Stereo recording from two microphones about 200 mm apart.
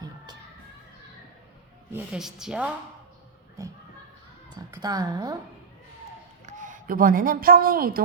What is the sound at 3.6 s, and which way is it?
Speech, 15° right (ahead or behind).